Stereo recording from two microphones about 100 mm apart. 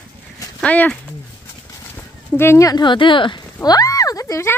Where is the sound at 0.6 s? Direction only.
15° left (ahead or behind).